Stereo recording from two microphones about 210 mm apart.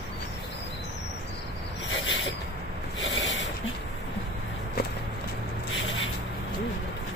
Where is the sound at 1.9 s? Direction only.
65° left (ahead or behind).